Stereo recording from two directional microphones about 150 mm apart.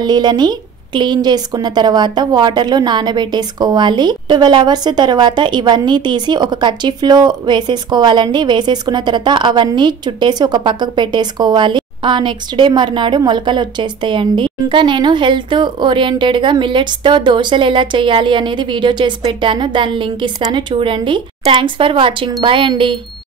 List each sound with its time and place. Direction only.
0.0 s a woman's voice: 30° right (ahead or behind)